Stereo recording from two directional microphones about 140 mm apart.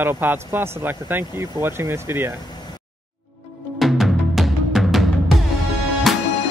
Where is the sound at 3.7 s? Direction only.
Centre (ahead or behind).